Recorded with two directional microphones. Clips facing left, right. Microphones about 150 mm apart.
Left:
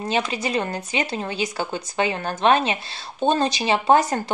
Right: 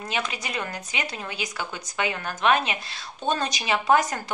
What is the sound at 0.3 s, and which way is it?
A woman's voice, 30° left (ahead or behind).